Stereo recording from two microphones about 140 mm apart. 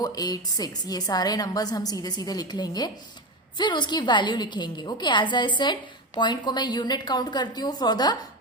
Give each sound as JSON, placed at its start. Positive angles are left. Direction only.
{"t": 0.0, "sound": "a woman's voice", "side_deg": 25}